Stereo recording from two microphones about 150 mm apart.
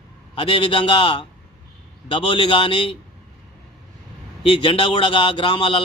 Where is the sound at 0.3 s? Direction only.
35° left (ahead or behind).